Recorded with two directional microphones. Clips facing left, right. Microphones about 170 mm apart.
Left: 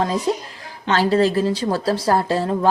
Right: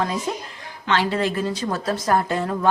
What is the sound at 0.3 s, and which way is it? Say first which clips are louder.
A woman's voice: left 6 dB; 30° left (ahead or behind).